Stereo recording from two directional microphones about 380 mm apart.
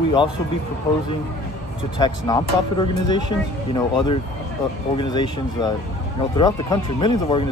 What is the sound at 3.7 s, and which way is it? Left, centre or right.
Speech, centre.